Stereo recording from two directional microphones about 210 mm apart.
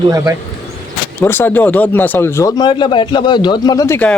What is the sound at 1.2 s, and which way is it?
Speech, 10° left (ahead or behind).